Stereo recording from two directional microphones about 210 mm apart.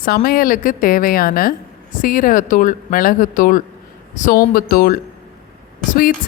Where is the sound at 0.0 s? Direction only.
45° left (ahead or behind).